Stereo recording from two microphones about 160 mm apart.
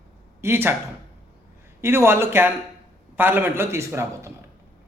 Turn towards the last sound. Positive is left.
turn(degrees=-15)  # may be behind; listen again after turning